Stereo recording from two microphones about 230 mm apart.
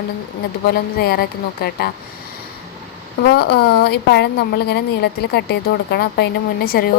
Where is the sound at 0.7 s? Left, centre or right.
Left.